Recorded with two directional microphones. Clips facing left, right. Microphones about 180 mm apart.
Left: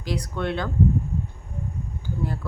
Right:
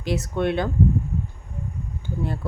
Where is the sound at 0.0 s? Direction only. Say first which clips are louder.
Right 4 dB; 25° right (ahead or behind).